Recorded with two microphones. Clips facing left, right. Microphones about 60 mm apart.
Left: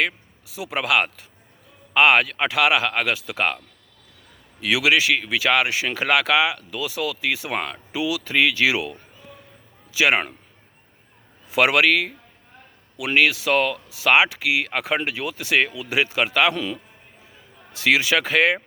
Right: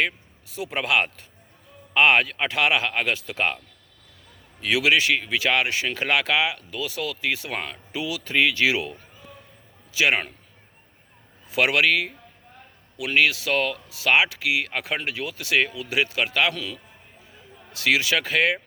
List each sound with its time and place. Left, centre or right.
0.5 s speech: centre
4.6 s speech: centre
9.9 s speech: centre
11.4 s speech: centre
13.0 s speech: centre